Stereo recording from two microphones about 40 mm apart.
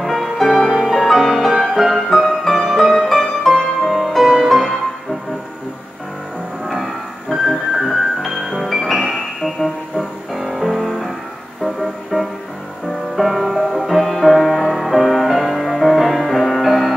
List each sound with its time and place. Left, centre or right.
0.0 s music: centre
6.6 s music: centre